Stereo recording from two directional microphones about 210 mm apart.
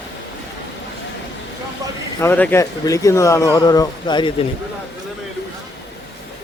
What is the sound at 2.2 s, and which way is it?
Speech, 10° left (ahead or behind).